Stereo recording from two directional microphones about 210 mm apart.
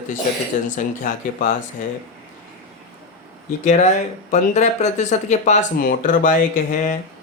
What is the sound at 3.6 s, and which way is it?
Speech, 35° left (ahead or behind).